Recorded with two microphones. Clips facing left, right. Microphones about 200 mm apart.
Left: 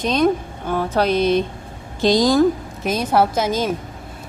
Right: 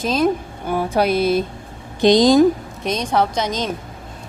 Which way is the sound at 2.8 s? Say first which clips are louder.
Left 3 dB; 5° left (ahead or behind).